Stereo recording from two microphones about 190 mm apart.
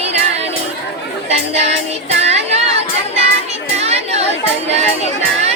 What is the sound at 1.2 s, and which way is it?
Chatter, 35° right (ahead or behind).